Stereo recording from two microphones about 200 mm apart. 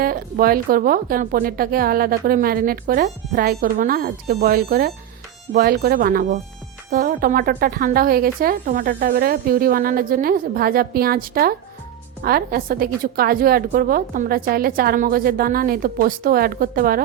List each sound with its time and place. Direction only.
0.0 s a woman's voice: 45° right (ahead or behind)